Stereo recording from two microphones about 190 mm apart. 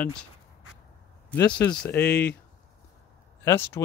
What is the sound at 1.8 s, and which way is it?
Speech, 10° left (ahead or behind).